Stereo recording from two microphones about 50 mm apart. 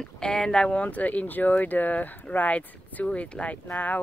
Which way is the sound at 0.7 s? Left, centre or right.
Left.